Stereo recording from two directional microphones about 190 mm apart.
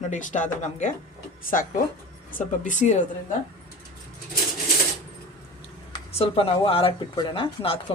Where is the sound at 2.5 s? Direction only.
40° left (ahead or behind).